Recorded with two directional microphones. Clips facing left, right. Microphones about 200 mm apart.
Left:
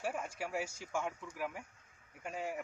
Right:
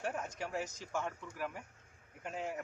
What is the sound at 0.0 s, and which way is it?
A man's voice, 10° left (ahead or behind).